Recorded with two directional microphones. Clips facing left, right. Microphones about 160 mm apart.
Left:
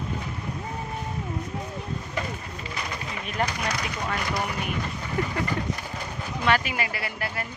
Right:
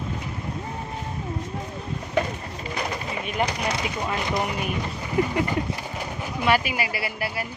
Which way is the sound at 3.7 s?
25° right (ahead or behind).